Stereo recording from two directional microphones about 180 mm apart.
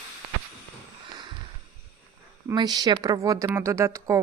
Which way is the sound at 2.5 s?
25° right (ahead or behind).